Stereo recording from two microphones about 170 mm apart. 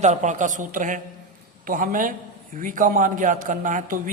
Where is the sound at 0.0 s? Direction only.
45° right (ahead or behind).